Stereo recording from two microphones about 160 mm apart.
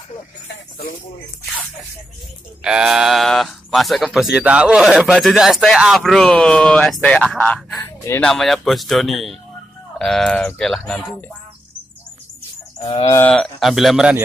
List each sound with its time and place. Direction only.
2.6 s speech: 5° right (ahead or behind); by 8.3 s 15° left (ahead or behind)
8.3 s speech: centre (ahead or behind)
12.7 s cattle: 30° left (ahead or behind)
13.1 s speech: 10° left (ahead or behind)